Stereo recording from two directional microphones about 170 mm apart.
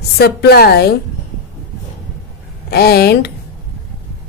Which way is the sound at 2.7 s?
65° left (ahead or behind).